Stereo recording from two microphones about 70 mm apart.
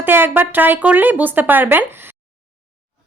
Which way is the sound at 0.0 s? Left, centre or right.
Right.